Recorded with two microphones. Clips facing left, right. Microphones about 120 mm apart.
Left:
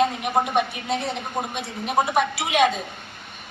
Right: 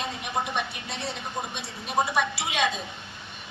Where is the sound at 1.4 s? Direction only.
50° left (ahead or behind).